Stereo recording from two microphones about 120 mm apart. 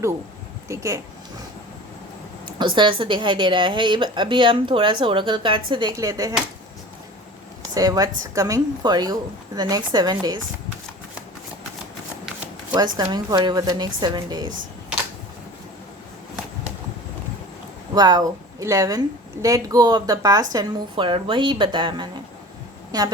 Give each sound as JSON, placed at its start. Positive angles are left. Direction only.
{"t": 0.7, "sound": "speech", "side_deg": -25}
{"t": 2.6, "sound": "a woman's voice", "side_deg": -40}
{"t": 6.0, "sound": "speech", "side_deg": -30}
{"t": 7.7, "sound": "speech", "side_deg": -30}
{"t": 12.7, "sound": "speech", "side_deg": -35}
{"t": 17.9, "sound": "speech", "side_deg": -35}
{"t": 20.9, "sound": "speech", "side_deg": -45}